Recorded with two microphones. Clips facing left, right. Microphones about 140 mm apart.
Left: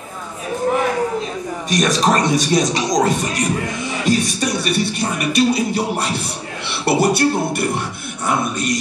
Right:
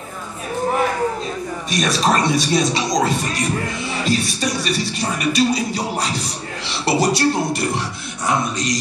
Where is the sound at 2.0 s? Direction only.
45° left (ahead or behind).